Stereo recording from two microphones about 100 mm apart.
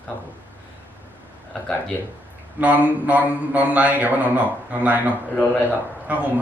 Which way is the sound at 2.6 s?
15° right (ahead or behind).